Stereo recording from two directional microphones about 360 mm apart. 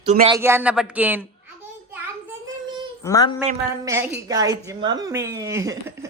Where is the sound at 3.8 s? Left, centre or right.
Centre.